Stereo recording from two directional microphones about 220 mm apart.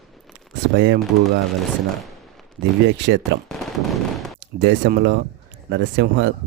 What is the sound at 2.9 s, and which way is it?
Speech, 55° right (ahead or behind).